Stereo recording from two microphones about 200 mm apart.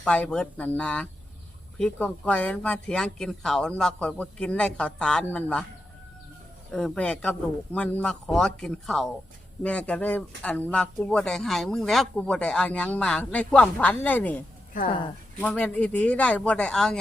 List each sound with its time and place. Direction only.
0.0 s speech: 5° left (ahead or behind)
6.7 s speech: 5° left (ahead or behind)
14.8 s speech: 25° left (ahead or behind)
15.4 s speech: 5° left (ahead or behind)